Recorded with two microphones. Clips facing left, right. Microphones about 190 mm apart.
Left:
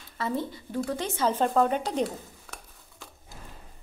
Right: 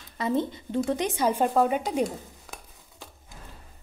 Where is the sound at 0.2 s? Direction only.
20° right (ahead or behind).